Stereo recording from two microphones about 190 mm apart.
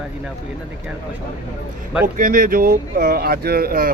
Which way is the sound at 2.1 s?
45° right (ahead or behind).